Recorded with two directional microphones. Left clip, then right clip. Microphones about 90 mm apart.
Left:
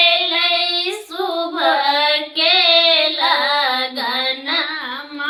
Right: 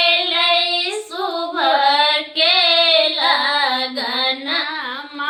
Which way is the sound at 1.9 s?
50° left (ahead or behind).